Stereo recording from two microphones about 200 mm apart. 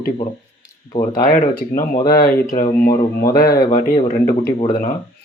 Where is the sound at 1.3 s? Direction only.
40° left (ahead or behind).